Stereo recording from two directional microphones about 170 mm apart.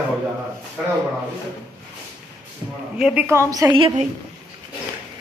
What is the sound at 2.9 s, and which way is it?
Speech, 5° right (ahead or behind).